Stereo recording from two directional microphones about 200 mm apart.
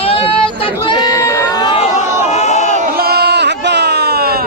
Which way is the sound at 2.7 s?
45° right (ahead or behind).